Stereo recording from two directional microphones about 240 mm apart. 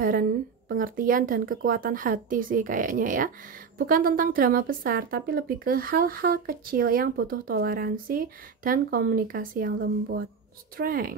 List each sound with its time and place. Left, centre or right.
0.0 s a woman's voice: right
10.8 s a woman's voice: right